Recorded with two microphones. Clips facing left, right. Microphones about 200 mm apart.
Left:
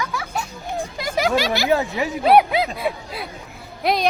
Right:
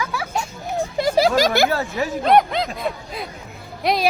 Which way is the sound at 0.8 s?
30° right (ahead or behind).